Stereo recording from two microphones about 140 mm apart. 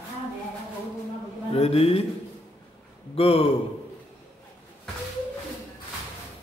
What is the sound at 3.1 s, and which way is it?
Speech, 45° left (ahead or behind).